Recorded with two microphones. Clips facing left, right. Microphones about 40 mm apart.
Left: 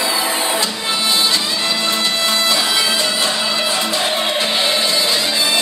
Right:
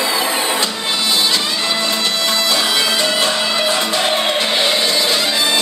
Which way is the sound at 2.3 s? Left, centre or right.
Left.